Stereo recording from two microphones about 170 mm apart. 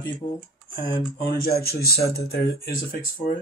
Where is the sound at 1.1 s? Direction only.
60° left (ahead or behind).